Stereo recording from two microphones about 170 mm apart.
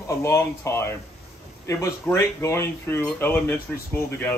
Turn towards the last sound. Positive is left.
turn(degrees=10)  # may be behind; listen again after turning